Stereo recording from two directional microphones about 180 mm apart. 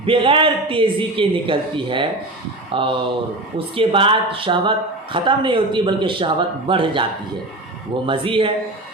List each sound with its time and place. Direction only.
0.0 s speech: 30° right (ahead or behind)
8.0 s speech: 30° right (ahead or behind)